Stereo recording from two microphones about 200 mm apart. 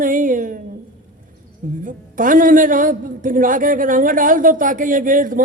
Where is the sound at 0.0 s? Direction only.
40° right (ahead or behind).